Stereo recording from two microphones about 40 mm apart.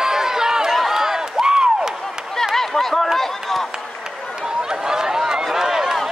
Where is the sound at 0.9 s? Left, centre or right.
Centre.